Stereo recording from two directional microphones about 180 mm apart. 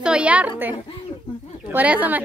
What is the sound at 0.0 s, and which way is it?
A woman's voice, 5° right (ahead or behind).